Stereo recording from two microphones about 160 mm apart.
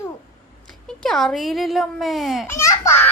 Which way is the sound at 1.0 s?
Centre (ahead or behind).